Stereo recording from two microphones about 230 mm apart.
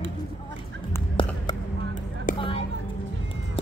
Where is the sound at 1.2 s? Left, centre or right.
Left.